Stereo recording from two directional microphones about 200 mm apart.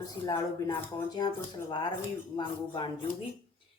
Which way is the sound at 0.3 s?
20° left (ahead or behind).